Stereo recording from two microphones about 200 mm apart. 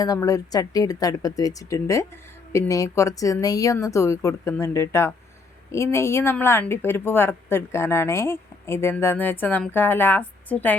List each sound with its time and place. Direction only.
0.0 s speech: 15° left (ahead or behind)